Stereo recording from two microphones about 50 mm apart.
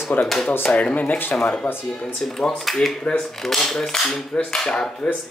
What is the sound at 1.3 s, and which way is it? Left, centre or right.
Speech, centre.